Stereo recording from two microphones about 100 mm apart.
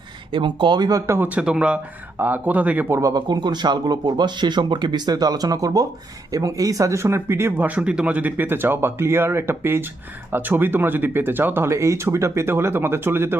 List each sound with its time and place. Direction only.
0.3 s speech: 50° right (ahead or behind)
1.0 s speech: 20° right (ahead or behind)
2.9 s speech: 35° right (ahead or behind)